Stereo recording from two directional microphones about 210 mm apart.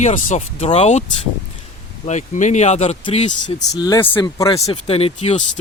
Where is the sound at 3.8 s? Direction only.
15° left (ahead or behind).